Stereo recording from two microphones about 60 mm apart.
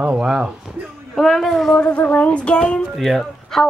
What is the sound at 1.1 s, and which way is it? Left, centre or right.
Child singing, centre.